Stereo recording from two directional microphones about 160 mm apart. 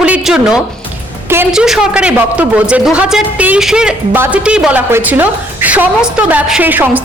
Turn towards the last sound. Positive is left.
turn(degrees=-10)  # may be behind; listen again after turning